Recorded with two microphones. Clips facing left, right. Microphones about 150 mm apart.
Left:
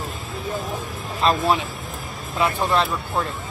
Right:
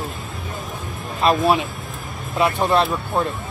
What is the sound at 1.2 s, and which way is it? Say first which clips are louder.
Speech: right 3 dB; 10° right (ahead or behind).